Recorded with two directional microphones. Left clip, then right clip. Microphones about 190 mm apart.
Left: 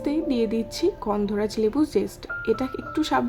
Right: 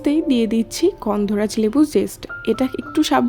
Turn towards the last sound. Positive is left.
turn(degrees=-35)  # may be behind; listen again after turning